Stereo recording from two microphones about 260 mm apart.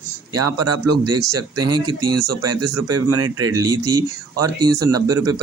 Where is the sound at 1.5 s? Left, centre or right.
Centre.